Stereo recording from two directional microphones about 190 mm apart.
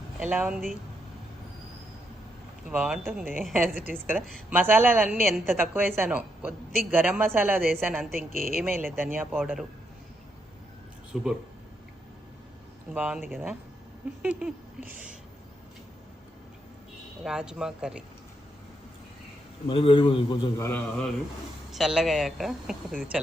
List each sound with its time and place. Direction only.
0.2 s speech: 5° right (ahead or behind)
2.6 s speech: 5° right (ahead or behind)
4.5 s speech: 10° right (ahead or behind)
5.1 s speech: centre (ahead or behind)
5.5 s speech: 10° right (ahead or behind)
11.1 s speech: centre (ahead or behind)
12.9 s speech: 5° right (ahead or behind)
14.2 s a sound: 5° right (ahead or behind)
17.2 s speech: 5° right (ahead or behind)
19.6 s a man's voice: 30° left (ahead or behind)
20.6 s a man's voice: 10° left (ahead or behind)
21.7 s speech: centre (ahead or behind)